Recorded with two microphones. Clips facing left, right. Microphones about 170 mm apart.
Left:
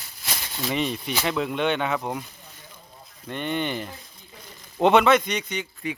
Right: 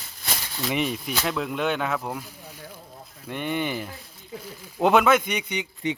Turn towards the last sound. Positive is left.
turn(degrees=-15)  # may be behind; listen again after turning